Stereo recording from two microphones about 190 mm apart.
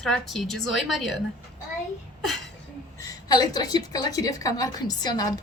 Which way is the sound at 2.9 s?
20° left (ahead or behind).